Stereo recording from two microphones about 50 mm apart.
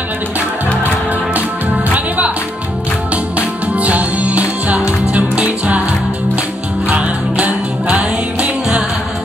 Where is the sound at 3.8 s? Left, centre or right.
Right.